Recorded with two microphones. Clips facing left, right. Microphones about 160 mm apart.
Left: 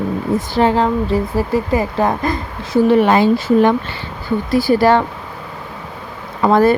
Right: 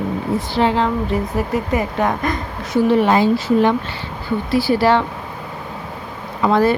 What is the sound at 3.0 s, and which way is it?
Speech, 55° left (ahead or behind).